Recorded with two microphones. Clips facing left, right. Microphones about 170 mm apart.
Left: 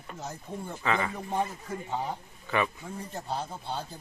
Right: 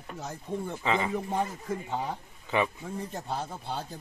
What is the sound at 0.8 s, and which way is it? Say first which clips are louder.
Speech: even; 15° right (ahead or behind).